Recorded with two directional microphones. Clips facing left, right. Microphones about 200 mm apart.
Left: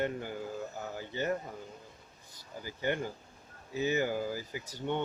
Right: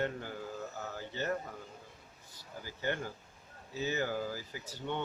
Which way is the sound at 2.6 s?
15° left (ahead or behind).